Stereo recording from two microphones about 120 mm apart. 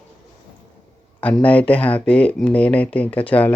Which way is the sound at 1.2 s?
10° left (ahead or behind).